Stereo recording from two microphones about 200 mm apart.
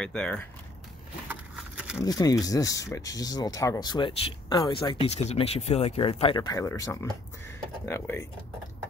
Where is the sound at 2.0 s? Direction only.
20° left (ahead or behind).